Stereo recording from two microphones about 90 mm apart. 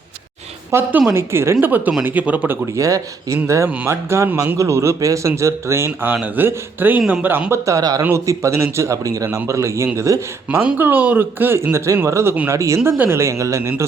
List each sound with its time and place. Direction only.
0.7 s speech: 20° right (ahead or behind)
2.7 s a man's voice: 35° right (ahead or behind); by 7.4 s 20° right (ahead or behind)
7.5 s a man's voice: 35° right (ahead or behind)
8.1 s a man's voice: 30° right (ahead or behind)